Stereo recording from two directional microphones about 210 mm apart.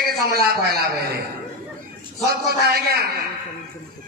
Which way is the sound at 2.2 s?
50° right (ahead or behind).